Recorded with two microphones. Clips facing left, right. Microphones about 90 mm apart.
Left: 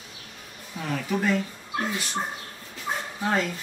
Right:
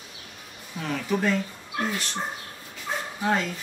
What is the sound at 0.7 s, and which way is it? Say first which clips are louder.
Speech: right 1 dB; 5° left (ahead or behind).